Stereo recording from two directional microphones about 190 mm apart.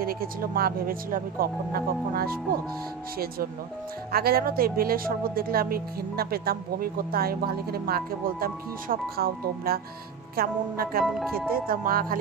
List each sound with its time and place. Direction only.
0.0 s speech: 50° right (ahead or behind)
4.1 s speech: 55° right (ahead or behind)
11.1 s speech: centre (ahead or behind)
11.5 s speech: 50° right (ahead or behind)